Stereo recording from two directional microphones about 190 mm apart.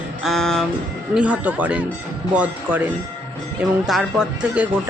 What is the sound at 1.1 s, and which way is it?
Speech, 5° right (ahead or behind).